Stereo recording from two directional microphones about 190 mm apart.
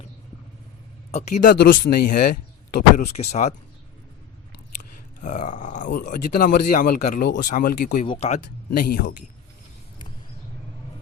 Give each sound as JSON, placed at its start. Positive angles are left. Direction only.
{"t": 1.1, "sound": "speech", "side_deg": 40}
{"t": 1.5, "sound": "speech", "side_deg": 60}
{"t": 5.2, "sound": "speech", "side_deg": 40}
{"t": 8.0, "sound": "speech", "side_deg": 25}
{"t": 8.3, "sound": "speech", "side_deg": 45}